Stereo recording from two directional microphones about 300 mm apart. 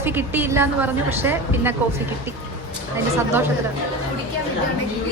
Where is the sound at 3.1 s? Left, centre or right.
Centre.